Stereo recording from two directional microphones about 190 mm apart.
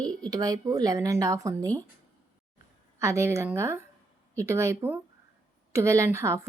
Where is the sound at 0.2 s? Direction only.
20° right (ahead or behind).